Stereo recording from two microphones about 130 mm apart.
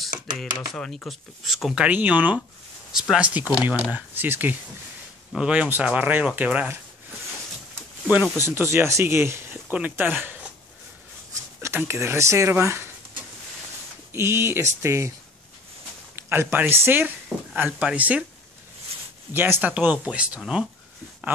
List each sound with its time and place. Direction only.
0.4 s speech: 5° left (ahead or behind)
1.9 s speech: 15° right (ahead or behind)
8.1 s speech: 15° right (ahead or behind)
11.6 s speech: 20° right (ahead or behind)
14.1 s speech: 20° right (ahead or behind)
16.2 s speech: 15° right (ahead or behind)
18.9 s a sound: 50° right (ahead or behind)
19.3 s speech: 15° right (ahead or behind)